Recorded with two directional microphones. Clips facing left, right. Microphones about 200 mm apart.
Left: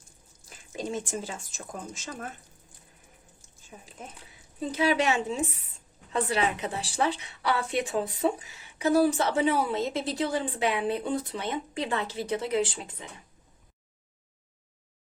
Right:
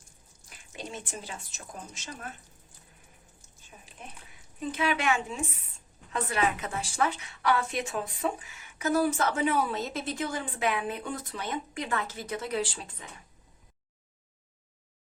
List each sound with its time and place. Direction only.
0.8 s speech: 45° left (ahead or behind)
4.6 s a woman's voice: 35° left (ahead or behind)